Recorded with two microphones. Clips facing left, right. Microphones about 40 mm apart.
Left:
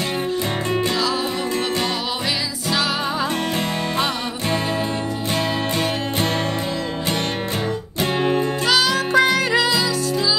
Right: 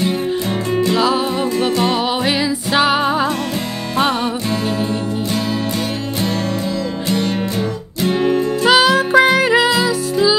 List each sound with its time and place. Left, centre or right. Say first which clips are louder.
2.2 s music: right 6 dB; right
8.0 s music: right 4 dB; left
8.6 s music: right 8 dB; right